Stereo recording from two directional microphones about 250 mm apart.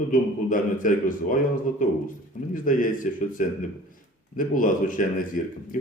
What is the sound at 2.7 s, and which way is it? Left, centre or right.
A man's voice, left.